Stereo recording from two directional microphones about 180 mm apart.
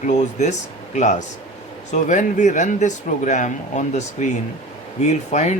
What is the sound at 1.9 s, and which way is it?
Speech, 45° left (ahead or behind).